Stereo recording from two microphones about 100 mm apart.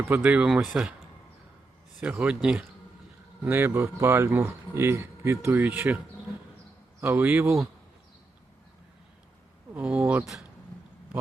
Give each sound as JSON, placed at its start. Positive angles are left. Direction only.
{"t": 0.2, "sound": "speech", "side_deg": -5}
{"t": 2.0, "sound": "speech", "side_deg": -10}
{"t": 3.4, "sound": "speech", "side_deg": -20}
{"t": 7.0, "sound": "speech", "side_deg": -20}
{"t": 9.7, "sound": "speech", "side_deg": -15}